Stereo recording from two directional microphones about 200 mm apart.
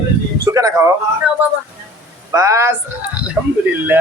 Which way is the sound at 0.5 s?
15° right (ahead or behind).